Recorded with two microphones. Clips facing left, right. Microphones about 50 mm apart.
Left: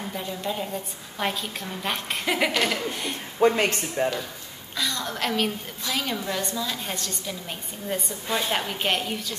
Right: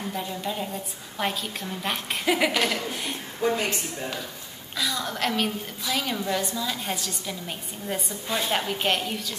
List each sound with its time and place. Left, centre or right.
0.1 s a woman's voice: centre
3.3 s speech: left
4.7 s a woman's voice: centre
8.3 s a woman's voice: centre